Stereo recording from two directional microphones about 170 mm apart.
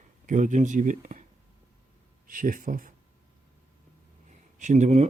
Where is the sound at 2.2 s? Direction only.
55° right (ahead or behind).